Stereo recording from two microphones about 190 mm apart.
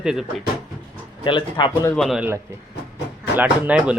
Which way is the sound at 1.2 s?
25° left (ahead or behind).